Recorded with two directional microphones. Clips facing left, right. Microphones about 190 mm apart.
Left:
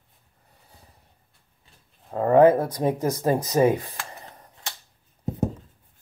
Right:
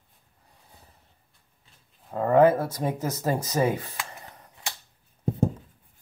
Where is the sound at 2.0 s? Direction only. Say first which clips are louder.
Left 3 dB; 15° left (ahead or behind).